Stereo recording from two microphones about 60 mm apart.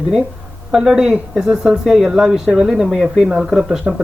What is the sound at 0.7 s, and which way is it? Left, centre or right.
Speech, centre.